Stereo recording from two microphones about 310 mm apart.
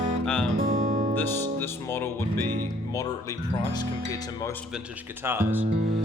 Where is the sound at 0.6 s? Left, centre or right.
Right.